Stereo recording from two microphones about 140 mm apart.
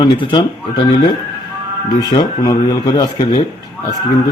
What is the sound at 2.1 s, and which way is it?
Speech, 30° left (ahead or behind).